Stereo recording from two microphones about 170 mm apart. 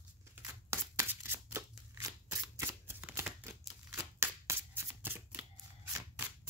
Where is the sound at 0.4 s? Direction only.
15° right (ahead or behind).